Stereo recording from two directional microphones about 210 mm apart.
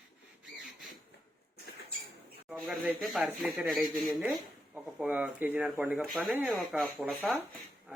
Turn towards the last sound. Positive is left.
turn(degrees=-5)  # may be behind; listen again after turning